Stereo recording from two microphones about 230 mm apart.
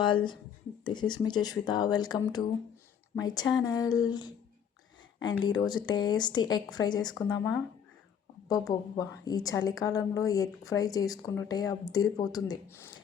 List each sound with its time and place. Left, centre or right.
0.0 s a woman's voice: centre